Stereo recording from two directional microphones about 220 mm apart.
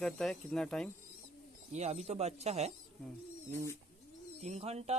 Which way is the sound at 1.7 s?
30° right (ahead or behind).